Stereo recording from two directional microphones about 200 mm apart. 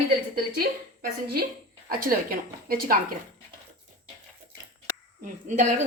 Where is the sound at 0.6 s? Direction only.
50° right (ahead or behind).